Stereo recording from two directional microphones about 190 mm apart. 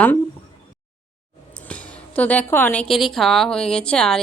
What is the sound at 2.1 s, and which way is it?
A woman's voice, 10° left (ahead or behind).